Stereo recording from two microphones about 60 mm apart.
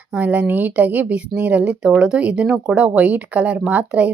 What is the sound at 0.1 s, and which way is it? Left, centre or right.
Speech, right.